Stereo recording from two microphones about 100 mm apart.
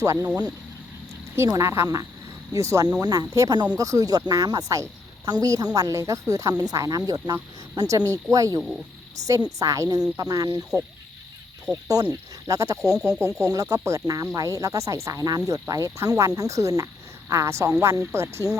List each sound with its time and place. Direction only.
0.0 s speech: 30° right (ahead or behind)
1.4 s speech: 30° right (ahead or behind)
11.7 s speech: 35° right (ahead or behind)
18.4 s speech: 35° left (ahead or behind)